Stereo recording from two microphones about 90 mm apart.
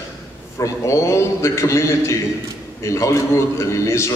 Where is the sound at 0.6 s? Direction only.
35° left (ahead or behind).